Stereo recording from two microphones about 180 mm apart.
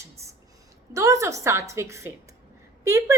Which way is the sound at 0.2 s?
15° right (ahead or behind).